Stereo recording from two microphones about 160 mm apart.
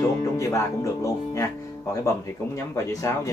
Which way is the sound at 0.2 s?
20° left (ahead or behind).